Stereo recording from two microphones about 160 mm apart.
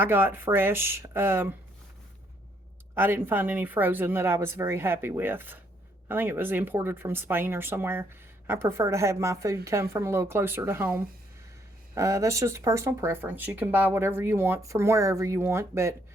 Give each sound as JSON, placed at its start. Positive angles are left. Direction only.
{"t": 0.0, "sound": "speech", "side_deg": -15}
{"t": 2.9, "sound": "speech", "side_deg": -15}